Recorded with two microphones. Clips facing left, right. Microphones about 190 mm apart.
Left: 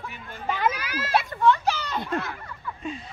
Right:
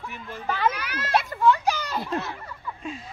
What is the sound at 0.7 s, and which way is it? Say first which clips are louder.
Speech: left 1 dB; 65° right (ahead or behind).